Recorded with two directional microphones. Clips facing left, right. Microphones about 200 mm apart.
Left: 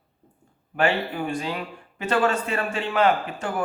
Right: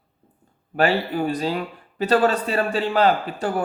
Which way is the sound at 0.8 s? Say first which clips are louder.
Right 3 dB; 35° right (ahead or behind).